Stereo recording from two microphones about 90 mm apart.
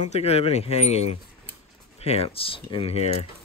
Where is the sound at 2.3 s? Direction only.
90° left.